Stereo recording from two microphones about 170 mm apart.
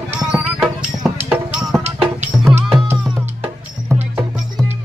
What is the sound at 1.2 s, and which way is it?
Music, 5° right (ahead or behind).